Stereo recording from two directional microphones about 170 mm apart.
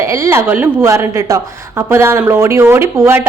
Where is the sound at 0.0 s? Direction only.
15° right (ahead or behind).